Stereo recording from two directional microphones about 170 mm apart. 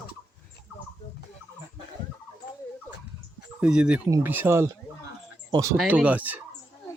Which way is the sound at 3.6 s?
5° right (ahead or behind).